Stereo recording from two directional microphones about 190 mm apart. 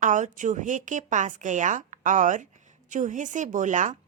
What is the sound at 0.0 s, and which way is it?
A woman's voice, 40° right (ahead or behind).